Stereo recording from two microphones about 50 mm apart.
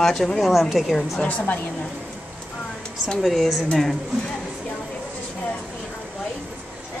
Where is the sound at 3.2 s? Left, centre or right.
Centre.